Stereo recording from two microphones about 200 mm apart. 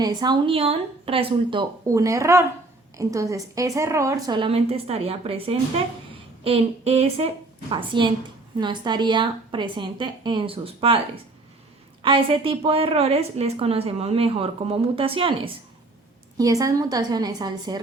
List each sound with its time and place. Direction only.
0.0 s a woman's voice: 20° right (ahead or behind)
12.0 s a woman's voice: 25° right (ahead or behind)